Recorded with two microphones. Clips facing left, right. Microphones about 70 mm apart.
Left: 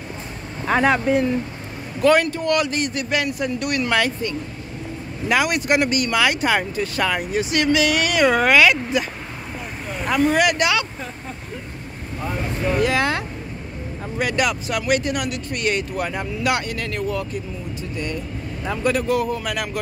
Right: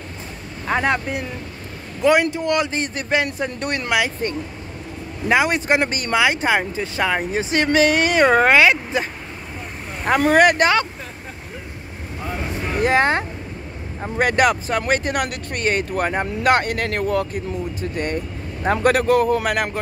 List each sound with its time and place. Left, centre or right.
0.7 s speech: centre
2.0 s speech: centre
4.2 s speech: right
5.3 s speech: right
6.1 s speech: right
10.0 s speech: right
12.8 s speech: right